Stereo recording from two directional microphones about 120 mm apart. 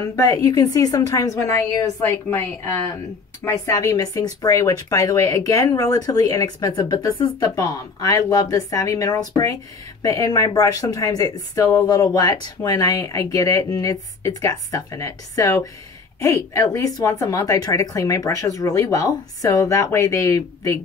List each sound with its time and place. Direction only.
0.0 s speech: 30° left (ahead or behind)